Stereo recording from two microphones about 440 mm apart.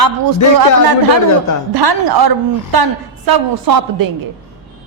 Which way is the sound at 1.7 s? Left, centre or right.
Right.